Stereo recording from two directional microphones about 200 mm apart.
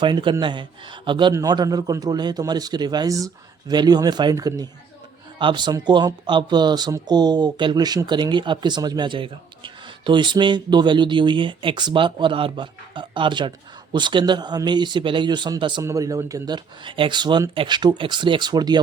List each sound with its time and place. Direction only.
0.0 s speech: 25° right (ahead or behind)